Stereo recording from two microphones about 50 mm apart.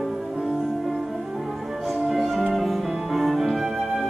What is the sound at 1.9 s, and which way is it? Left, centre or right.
Music, centre.